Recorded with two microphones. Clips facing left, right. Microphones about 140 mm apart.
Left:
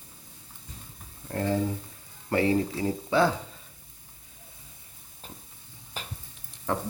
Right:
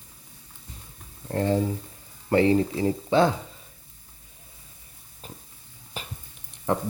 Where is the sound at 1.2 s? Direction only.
30° right (ahead or behind).